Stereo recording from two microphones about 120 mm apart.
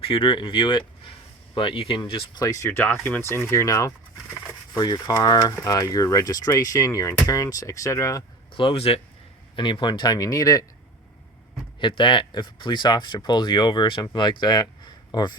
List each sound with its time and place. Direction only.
0.0 s speech: 45° left (ahead or behind)
2.4 s speech: 25° left (ahead or behind)
8.5 s speech: 50° left (ahead or behind)
9.6 s speech: 40° left (ahead or behind)
11.8 s speech: 45° left (ahead or behind)